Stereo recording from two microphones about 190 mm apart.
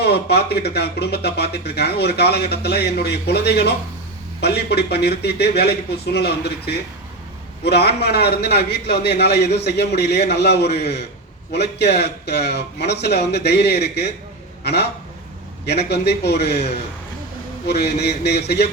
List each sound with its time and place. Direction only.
0.0 s a man's voice: 60° left (ahead or behind)
17.7 s speech: 60° left (ahead or behind)